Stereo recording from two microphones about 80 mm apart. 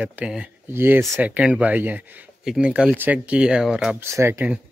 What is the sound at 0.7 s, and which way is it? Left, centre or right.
Speech, right.